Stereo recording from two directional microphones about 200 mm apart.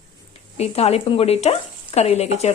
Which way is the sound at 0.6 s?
30° left (ahead or behind).